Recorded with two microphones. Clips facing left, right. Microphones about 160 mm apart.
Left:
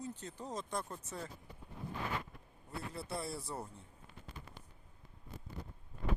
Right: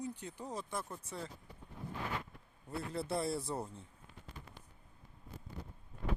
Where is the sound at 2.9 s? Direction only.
20° right (ahead or behind).